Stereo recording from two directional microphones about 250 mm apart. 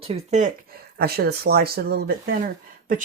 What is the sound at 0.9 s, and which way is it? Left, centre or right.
Speech, right.